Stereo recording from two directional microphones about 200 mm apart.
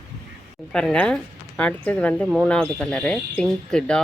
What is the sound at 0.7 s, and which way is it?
A woman's voice, 5° left (ahead or behind).